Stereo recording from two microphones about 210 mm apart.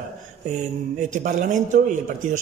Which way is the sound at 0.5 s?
35° right (ahead or behind).